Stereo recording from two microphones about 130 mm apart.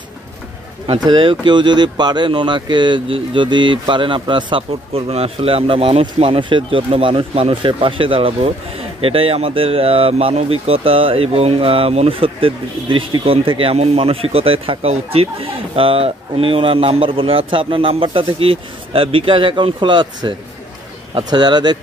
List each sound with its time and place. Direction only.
0.8 s speech: 35° right (ahead or behind)